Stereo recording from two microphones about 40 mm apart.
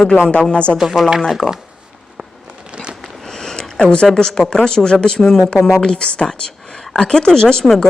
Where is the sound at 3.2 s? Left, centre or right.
Centre.